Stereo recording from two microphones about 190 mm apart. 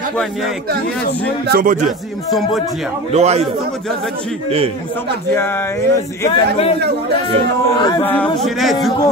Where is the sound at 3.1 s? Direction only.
35° right (ahead or behind).